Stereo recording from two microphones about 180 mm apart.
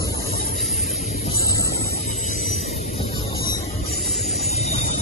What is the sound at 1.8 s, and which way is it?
Music, 55° left (ahead or behind).